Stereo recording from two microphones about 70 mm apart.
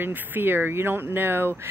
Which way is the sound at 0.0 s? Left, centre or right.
Right.